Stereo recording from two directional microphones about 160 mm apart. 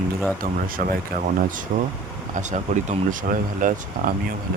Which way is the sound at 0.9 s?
60° right (ahead or behind).